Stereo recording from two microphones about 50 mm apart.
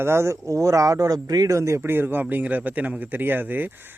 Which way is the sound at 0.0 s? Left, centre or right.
Right.